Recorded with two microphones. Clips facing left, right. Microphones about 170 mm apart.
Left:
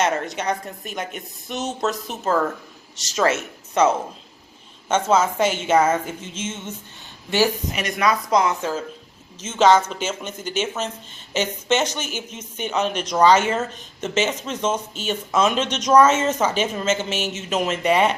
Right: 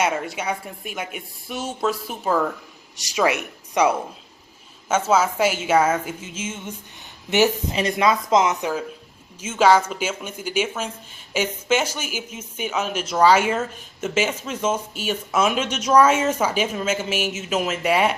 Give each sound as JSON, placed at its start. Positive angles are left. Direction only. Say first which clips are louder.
{"t": 0.0, "sound": "speech", "louder": "left 1 dB", "side_deg": -10}
{"t": 7.3, "sound": "speech", "louder": "right 1 dB", "side_deg": -20}